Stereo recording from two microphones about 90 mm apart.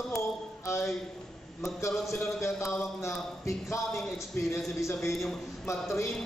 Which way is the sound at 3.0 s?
35° left (ahead or behind).